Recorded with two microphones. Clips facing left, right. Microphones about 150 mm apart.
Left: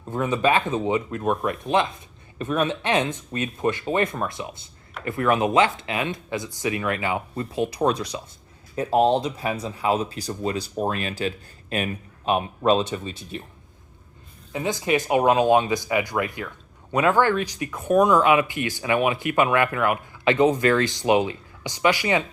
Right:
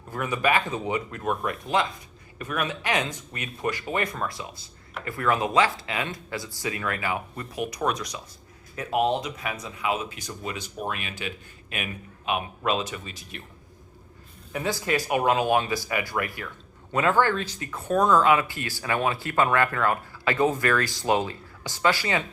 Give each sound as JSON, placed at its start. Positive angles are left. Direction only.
{"t": 0.1, "sound": "speech", "side_deg": 25}
{"t": 14.5, "sound": "speech", "side_deg": 20}